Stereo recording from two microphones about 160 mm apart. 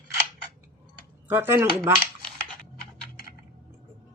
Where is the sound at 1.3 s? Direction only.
15° right (ahead or behind).